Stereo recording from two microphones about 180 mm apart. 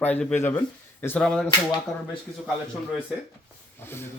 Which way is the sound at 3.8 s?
15° left (ahead or behind).